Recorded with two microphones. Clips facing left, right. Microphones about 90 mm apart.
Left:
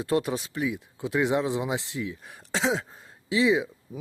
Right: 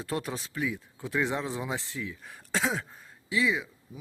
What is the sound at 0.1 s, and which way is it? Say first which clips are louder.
Speech: left 7 dB; 15° left (ahead or behind).